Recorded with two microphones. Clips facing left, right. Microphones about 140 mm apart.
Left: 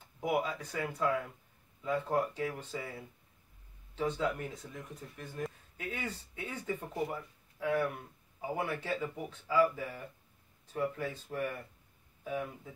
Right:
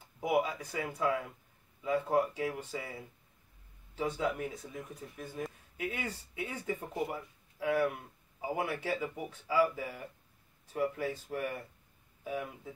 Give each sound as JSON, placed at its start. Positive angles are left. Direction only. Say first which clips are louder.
{"t": 0.2, "sound": "speech", "louder": "right 2 dB", "side_deg": -10}